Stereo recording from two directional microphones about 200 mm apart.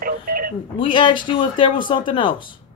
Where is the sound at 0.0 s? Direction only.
45° right (ahead or behind).